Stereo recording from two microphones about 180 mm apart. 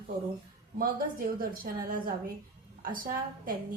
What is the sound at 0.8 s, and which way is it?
A woman's voice, 55° right (ahead or behind).